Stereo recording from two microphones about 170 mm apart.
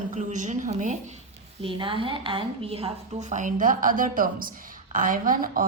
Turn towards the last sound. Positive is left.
turn(degrees=-55)  # may be behind; listen again after turning